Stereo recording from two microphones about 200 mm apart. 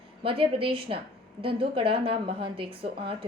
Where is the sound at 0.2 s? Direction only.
25° right (ahead or behind).